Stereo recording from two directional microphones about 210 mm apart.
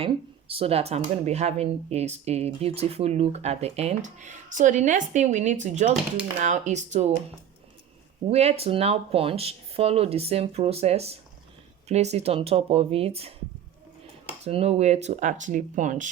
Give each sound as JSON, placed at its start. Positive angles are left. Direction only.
{"t": 0.0, "sound": "speech", "side_deg": -25}
{"t": 8.3, "sound": "speech", "side_deg": -30}
{"t": 14.4, "sound": "speech", "side_deg": -30}